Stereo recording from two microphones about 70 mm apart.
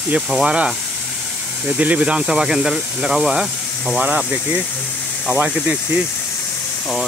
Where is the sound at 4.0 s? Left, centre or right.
Centre.